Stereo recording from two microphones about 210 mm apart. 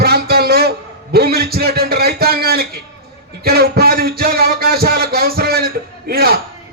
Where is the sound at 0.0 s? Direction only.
50° right (ahead or behind).